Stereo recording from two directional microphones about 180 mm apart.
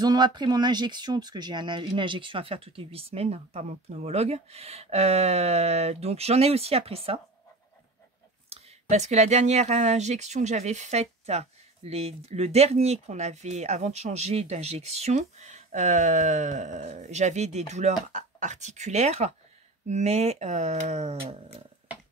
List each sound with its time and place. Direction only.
0.0 s speech: 25° right (ahead or behind)
8.5 s speech: 35° right (ahead or behind)